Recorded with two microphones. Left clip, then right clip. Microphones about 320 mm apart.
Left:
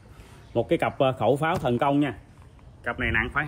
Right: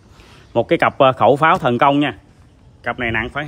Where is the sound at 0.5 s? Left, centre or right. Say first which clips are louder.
Right 9 dB; right.